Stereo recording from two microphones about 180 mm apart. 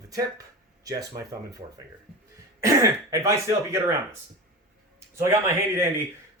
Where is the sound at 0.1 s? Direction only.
20° right (ahead or behind).